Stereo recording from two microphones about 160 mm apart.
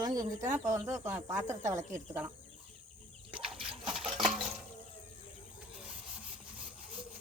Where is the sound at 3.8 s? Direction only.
5° right (ahead or behind).